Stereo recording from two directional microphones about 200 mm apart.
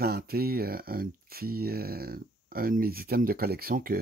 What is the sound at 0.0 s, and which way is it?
Speech, 50° right (ahead or behind).